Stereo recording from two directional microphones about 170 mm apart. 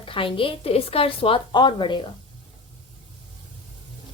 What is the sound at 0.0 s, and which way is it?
Speech, 30° left (ahead or behind).